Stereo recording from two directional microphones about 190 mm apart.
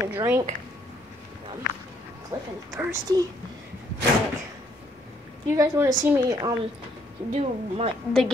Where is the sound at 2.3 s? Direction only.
15° right (ahead or behind).